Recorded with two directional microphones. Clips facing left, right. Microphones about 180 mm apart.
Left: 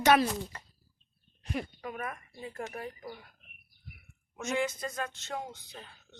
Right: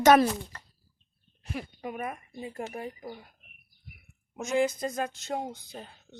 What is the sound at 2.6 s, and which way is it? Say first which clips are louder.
Speech: right 3 dB; 25° right (ahead or behind).